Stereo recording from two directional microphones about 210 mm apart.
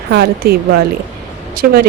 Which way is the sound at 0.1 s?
50° right (ahead or behind).